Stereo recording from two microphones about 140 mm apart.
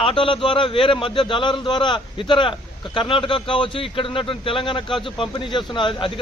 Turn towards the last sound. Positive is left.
turn(degrees=35)  # may be behind; listen again after turning